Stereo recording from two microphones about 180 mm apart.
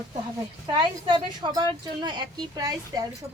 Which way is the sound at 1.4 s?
25° right (ahead or behind).